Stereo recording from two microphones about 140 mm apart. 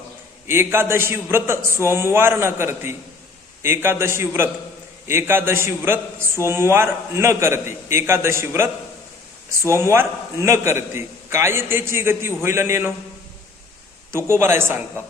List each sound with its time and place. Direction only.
0.4 s a man's voice: 15° right (ahead or behind)
14.1 s a man's voice: 20° right (ahead or behind)